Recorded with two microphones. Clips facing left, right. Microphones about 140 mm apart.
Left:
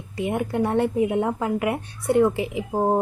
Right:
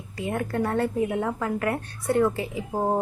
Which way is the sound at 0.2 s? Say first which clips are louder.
Left 3 dB; 15° left (ahead or behind).